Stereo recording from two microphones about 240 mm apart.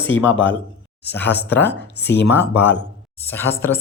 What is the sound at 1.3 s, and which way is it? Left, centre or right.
Speech, left.